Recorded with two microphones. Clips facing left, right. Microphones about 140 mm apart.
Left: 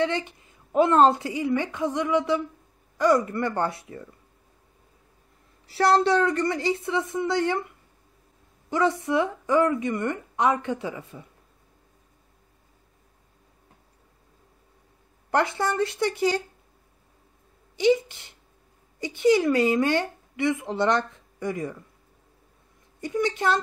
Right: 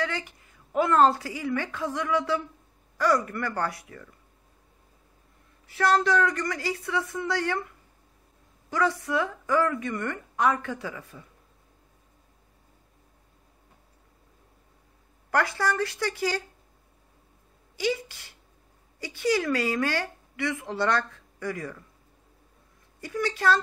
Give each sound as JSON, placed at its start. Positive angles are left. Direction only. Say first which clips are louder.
{"t": 0.0, "sound": "a woman's voice", "louder": "left 6 dB", "side_deg": 25}
{"t": 5.7, "sound": "a woman's voice", "louder": "left 3 dB", "side_deg": 30}
{"t": 15.3, "sound": "a woman's voice", "louder": "left 2 dB", "side_deg": 20}
{"t": 17.7, "sound": "a woman's voice", "louder": "left 8 dB", "side_deg": 20}
{"t": 22.9, "sound": "a woman's voice", "louder": "left 4 dB", "side_deg": 20}